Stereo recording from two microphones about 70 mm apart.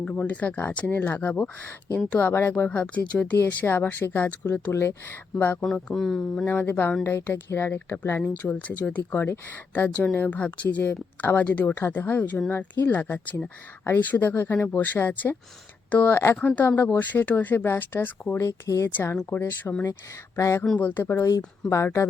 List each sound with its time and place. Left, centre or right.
0.0 s speech: left
2.6 s speech: centre
3.3 s speech: left
4.7 s speech: left
5.9 s speech: centre
6.3 s speech: left
8.4 s speech: left
16.6 s speech: left
18.4 s speech: left
20.7 s speech: left